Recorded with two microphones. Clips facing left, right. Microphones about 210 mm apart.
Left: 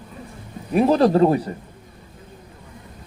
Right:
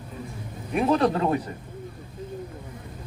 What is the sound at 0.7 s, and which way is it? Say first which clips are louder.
Speech: left 6 dB; 35° left (ahead or behind).